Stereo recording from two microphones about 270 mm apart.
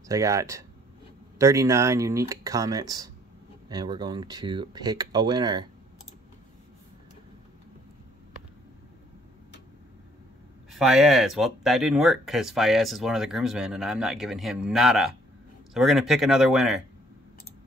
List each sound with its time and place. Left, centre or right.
0.1 s speech: centre
10.7 s speech: centre